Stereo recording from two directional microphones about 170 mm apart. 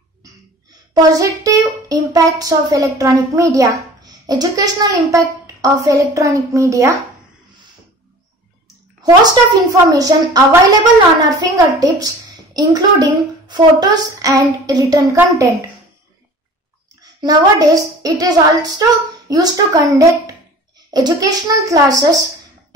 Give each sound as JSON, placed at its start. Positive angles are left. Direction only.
{"t": 0.9, "sound": "a child's voice", "side_deg": -20}
{"t": 9.0, "sound": "a child's voice", "side_deg": -20}
{"t": 17.0, "sound": "a child's voice", "side_deg": -20}